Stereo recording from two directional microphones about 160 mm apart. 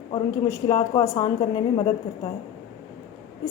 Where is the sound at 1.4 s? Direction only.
35° left (ahead or behind).